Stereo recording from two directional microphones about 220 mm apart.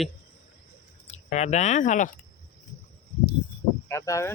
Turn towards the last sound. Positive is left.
turn(degrees=15)  # may be behind; listen again after turning